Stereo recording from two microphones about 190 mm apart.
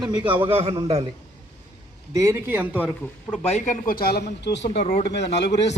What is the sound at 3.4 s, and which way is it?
Speech, 40° left (ahead or behind).